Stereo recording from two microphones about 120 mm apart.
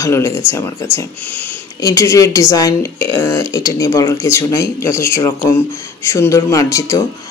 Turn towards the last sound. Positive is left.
turn(degrees=25)  # may be behind; listen again after turning